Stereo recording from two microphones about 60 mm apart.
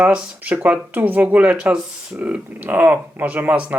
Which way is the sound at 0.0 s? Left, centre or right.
Right.